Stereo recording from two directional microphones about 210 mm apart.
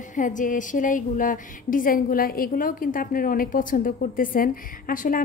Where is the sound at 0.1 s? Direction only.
40° left (ahead or behind).